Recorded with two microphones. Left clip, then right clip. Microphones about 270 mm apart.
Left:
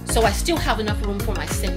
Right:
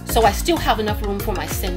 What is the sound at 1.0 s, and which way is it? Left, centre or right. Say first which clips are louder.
Music: right 3 dB; centre.